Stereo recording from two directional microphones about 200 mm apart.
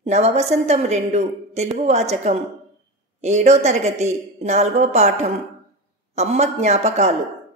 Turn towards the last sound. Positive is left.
turn(degrees=-35)  # may be behind; listen again after turning